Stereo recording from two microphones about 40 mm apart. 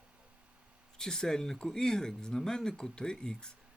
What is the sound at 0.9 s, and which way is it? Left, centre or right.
Speech, centre.